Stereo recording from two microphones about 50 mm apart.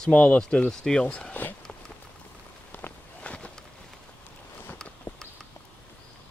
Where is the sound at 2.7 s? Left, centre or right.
Left.